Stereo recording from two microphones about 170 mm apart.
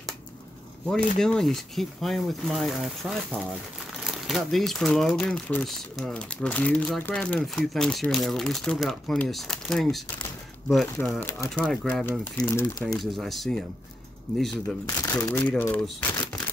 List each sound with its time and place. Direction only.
0.8 s speech: 5° left (ahead or behind)
11.5 s speech: centre (ahead or behind)
12.4 s speech: 20° left (ahead or behind)
12.9 s speech: centre (ahead or behind)
14.9 s speech: 20° left (ahead or behind)